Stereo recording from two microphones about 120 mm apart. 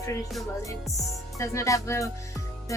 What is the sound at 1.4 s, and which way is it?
Speech, 25° left (ahead or behind).